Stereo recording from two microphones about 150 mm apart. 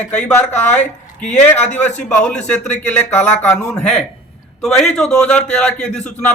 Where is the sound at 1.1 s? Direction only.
10° left (ahead or behind).